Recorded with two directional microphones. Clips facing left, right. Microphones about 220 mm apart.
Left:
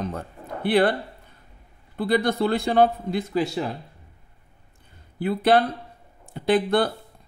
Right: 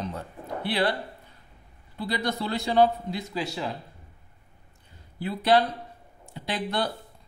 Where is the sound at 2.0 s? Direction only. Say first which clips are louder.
Left 8 dB; 55° left (ahead or behind).